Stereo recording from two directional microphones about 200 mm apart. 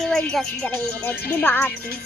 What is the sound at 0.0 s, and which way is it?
Speech, 5° left (ahead or behind).